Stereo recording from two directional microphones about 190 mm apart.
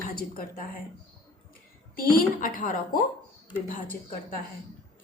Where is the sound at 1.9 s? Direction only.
45° left (ahead or behind).